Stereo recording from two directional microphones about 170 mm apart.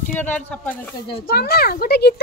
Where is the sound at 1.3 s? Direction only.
65° left (ahead or behind).